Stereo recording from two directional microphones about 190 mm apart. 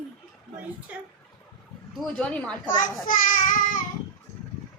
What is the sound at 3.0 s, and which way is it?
Child singing, 45° left (ahead or behind).